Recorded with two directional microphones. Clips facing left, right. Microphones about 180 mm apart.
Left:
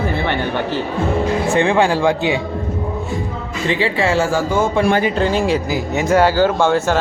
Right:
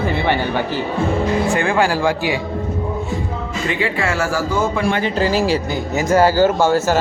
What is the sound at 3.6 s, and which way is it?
Speech, 30° left (ahead or behind).